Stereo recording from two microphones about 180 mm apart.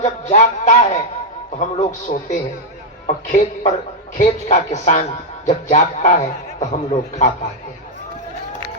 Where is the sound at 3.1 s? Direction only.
40° left (ahead or behind).